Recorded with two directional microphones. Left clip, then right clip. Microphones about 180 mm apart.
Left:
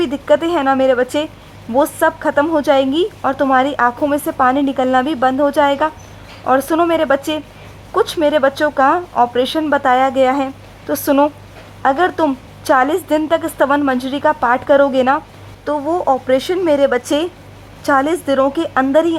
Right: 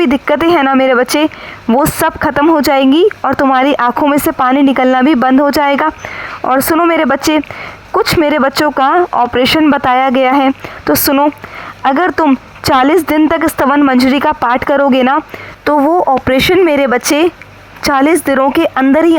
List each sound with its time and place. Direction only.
0.0 s speech: 30° right (ahead or behind)